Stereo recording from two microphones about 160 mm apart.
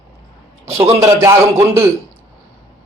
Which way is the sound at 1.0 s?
20° right (ahead or behind).